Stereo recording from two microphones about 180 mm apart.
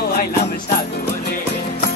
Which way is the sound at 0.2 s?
60° left (ahead or behind).